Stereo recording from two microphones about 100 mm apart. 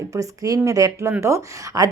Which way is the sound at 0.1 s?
35° right (ahead or behind).